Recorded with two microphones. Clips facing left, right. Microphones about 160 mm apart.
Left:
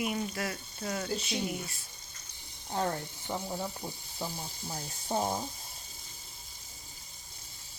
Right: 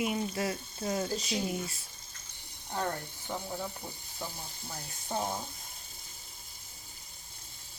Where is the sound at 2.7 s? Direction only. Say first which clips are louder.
Left 2 dB; 15° left (ahead or behind).